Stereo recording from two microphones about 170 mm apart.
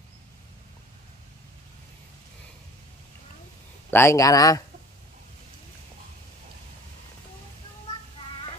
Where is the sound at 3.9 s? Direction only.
15° left (ahead or behind).